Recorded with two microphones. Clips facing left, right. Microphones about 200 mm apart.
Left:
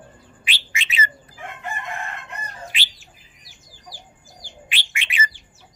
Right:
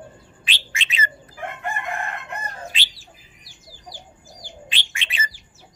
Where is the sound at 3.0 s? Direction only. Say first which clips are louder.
Right 3 dB; 30° right (ahead or behind).